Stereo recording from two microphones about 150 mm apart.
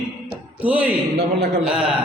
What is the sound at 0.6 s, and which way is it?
Speech, 10° right (ahead or behind).